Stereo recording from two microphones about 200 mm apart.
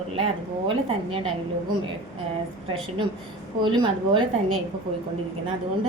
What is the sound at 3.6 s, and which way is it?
Speech, 25° right (ahead or behind).